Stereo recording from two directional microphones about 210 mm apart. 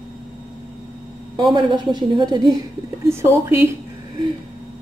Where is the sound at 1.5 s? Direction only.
20° right (ahead or behind).